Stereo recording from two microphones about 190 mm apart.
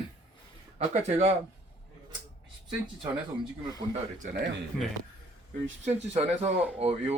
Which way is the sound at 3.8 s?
30° right (ahead or behind).